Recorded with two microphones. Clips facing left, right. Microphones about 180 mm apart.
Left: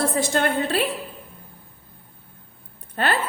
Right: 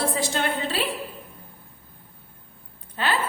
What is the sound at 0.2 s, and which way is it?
Speech, 50° left (ahead or behind).